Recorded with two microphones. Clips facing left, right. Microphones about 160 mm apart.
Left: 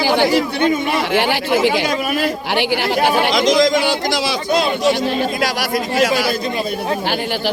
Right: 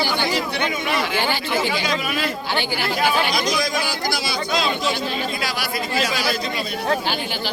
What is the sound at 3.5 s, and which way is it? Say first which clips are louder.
Speech: left 9 dB; 90° left.